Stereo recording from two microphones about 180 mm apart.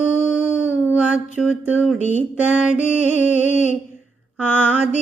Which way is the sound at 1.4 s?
5° right (ahead or behind).